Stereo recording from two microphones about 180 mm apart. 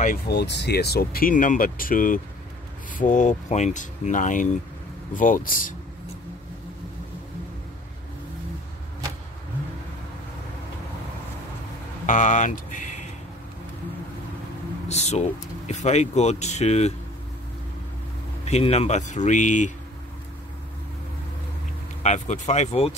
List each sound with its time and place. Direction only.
0.0 s speech: 60° left (ahead or behind)
12.1 s speech: 45° left (ahead or behind)
14.9 s speech: 35° left (ahead or behind)
18.4 s speech: 35° left (ahead or behind)
22.0 s speech: 40° left (ahead or behind)